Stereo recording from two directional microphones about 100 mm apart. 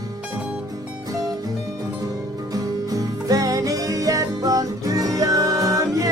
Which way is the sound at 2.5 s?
35° right (ahead or behind).